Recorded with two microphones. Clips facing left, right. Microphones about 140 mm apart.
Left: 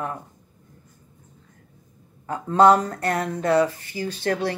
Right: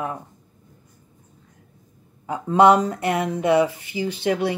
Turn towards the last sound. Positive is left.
turn(degrees=-15)  # may be behind; listen again after turning